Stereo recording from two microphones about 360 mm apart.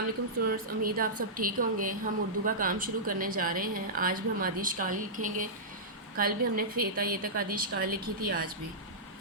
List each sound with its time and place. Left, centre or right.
0.4 s speech: right